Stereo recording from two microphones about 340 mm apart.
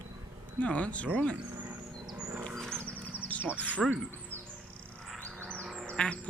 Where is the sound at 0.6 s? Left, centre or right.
Centre.